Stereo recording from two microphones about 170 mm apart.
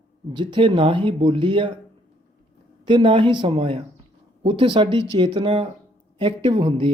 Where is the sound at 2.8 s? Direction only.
30° right (ahead or behind).